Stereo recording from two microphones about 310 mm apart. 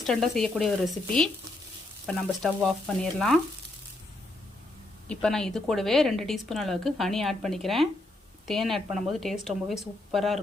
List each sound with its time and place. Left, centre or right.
0.0 s a woman's voice: centre
2.0 s a woman's voice: centre
5.0 s a woman's voice: centre